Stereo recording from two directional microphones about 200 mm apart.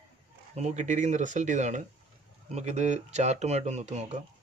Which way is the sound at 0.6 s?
35° right (ahead or behind).